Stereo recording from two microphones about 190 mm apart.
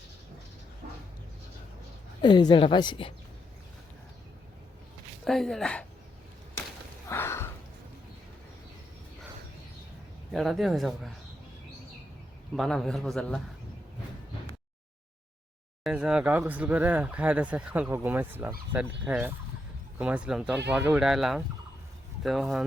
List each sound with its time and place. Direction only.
2.2 s a woman's voice: 25° left (ahead or behind)
5.2 s a man's voice: centre (ahead or behind)
7.1 s a sound: 15° left (ahead or behind)
10.3 s a man's voice: centre (ahead or behind)
12.5 s a man's voice: centre (ahead or behind)
15.8 s a man's voice: 5° right (ahead or behind)